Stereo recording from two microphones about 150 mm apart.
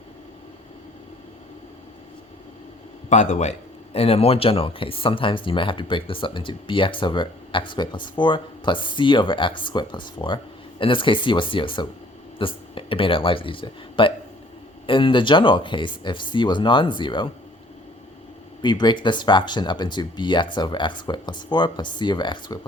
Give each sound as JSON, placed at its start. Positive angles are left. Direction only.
{"t": 3.1, "sound": "a man's voice", "side_deg": 50}
{"t": 3.9, "sound": "speech", "side_deg": 40}
{"t": 18.6, "sound": "speech", "side_deg": 30}